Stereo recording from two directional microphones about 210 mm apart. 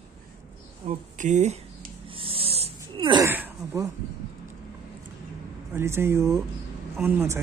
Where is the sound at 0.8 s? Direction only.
35° right (ahead or behind).